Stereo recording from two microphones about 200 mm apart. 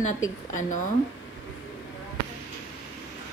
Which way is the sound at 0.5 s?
40° left (ahead or behind).